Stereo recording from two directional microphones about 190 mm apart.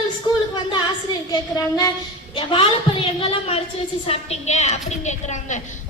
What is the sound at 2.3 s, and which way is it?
A woman's voice, 25° left (ahead or behind).